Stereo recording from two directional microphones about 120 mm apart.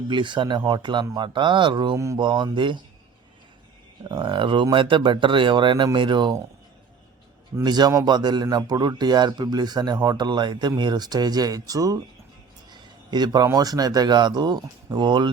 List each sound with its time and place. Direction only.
0.1 s speech: 40° right (ahead or behind)
4.1 s speech: 45° right (ahead or behind)
7.6 s speech: 35° right (ahead or behind)